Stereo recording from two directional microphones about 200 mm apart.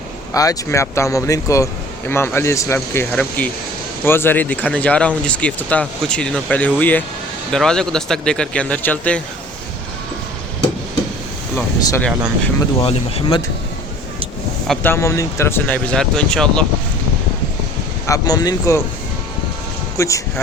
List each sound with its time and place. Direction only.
0.3 s speech: 15° left (ahead or behind)
11.5 s speech: 10° left (ahead or behind)
12.8 s speech: 30° left (ahead or behind)
14.7 s speech: 10° left (ahead or behind)
18.0 s speech: 15° left (ahead or behind)
20.0 s speech: 15° left (ahead or behind)